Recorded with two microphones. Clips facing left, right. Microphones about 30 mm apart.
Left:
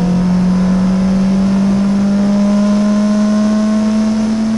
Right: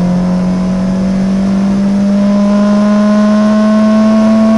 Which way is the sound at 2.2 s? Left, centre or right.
Centre.